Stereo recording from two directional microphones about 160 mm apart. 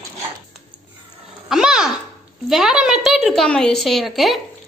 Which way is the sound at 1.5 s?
5° right (ahead or behind).